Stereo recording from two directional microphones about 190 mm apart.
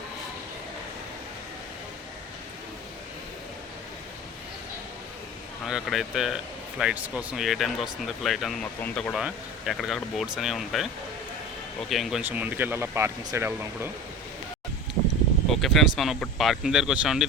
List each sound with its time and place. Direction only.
5.6 s speech: centre (ahead or behind)
11.9 s speech: centre (ahead or behind)
15.4 s speech: centre (ahead or behind)